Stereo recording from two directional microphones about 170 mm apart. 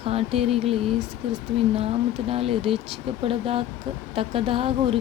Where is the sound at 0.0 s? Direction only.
35° right (ahead or behind).